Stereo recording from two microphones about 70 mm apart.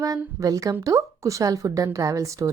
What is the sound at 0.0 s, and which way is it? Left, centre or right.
A woman's voice, right.